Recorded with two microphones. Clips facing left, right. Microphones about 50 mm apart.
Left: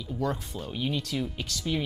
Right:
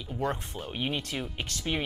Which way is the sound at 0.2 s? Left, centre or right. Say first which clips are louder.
Even; right.